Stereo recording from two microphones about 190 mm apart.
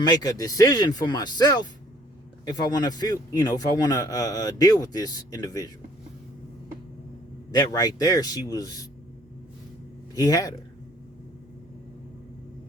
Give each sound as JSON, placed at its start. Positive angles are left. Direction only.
{"t": 0.0, "sound": "a man's voice", "side_deg": 20}
{"t": 7.5, "sound": "a man's voice", "side_deg": 20}
{"t": 10.2, "sound": "a man's voice", "side_deg": 20}